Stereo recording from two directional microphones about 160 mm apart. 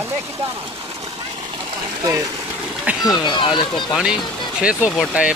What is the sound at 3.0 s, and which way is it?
Speech, 25° left (ahead or behind).